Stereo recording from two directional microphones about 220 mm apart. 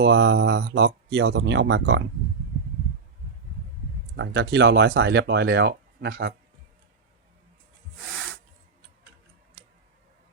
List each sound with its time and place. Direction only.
0.0 s speech: 55° right (ahead or behind)
4.2 s speech: 50° right (ahead or behind)